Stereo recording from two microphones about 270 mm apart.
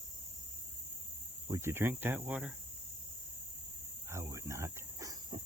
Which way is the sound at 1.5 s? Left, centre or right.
Centre.